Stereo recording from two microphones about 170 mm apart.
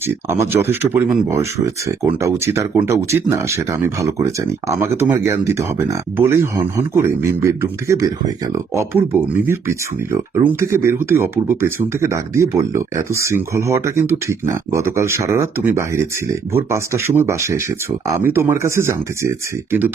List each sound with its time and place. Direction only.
0.1 s speech: 15° right (ahead or behind)